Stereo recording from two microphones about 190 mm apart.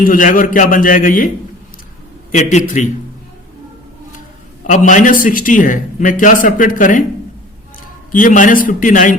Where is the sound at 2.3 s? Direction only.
40° left (ahead or behind).